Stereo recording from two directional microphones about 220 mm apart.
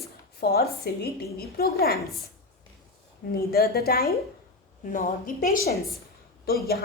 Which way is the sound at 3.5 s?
45° left (ahead or behind).